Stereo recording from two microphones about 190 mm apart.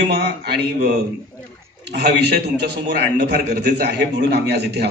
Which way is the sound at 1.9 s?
60° right (ahead or behind).